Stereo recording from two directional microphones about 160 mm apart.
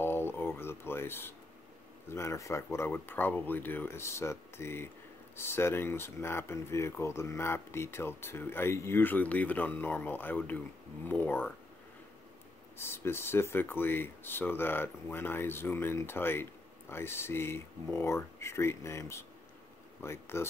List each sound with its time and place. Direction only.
0.0 s a sound: 15° left (ahead or behind)
2.0 s speech: 15° left (ahead or behind)
12.7 s speech: 15° left (ahead or behind)